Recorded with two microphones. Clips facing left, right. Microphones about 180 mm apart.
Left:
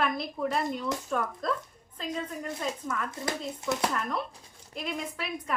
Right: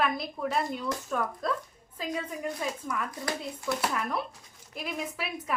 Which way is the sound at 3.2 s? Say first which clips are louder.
Left 1 dB; 20° left (ahead or behind).